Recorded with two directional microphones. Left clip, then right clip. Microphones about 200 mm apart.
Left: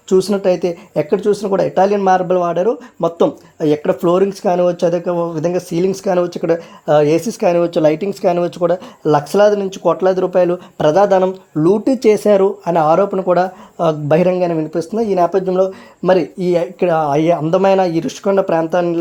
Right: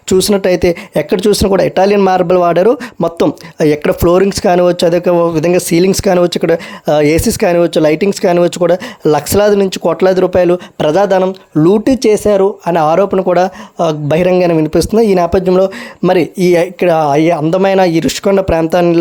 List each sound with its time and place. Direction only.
0.1 s speech: 25° right (ahead or behind)
11.5 s speech: 25° right (ahead or behind)
12.0 s speech: 10° right (ahead or behind)